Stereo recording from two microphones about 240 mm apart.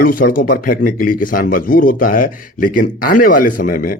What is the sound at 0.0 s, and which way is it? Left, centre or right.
Speech, left.